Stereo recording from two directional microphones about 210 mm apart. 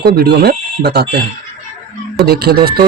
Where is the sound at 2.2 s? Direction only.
50° right (ahead or behind).